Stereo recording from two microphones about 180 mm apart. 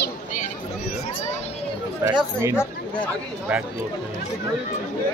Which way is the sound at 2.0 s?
15° right (ahead or behind).